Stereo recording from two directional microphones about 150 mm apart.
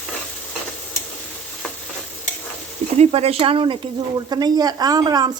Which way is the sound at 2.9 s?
40° right (ahead or behind).